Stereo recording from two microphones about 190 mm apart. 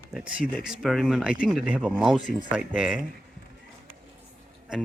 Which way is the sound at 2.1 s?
25° right (ahead or behind).